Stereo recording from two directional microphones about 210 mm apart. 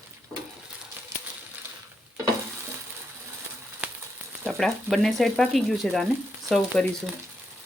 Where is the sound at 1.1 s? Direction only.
15° right (ahead or behind).